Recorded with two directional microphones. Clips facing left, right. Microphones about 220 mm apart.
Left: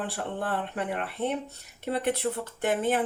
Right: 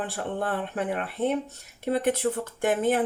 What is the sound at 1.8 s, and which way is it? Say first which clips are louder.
Speech: right 3 dB; 45° right (ahead or behind).